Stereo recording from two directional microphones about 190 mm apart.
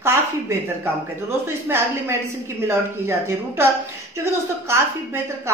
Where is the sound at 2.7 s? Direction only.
15° right (ahead or behind).